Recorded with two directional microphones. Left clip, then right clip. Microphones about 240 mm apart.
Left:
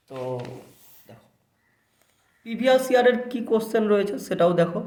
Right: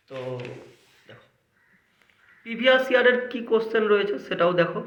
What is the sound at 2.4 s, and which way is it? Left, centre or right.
Speech, left.